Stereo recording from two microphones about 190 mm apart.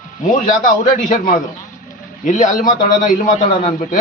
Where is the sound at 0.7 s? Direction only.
45° left (ahead or behind).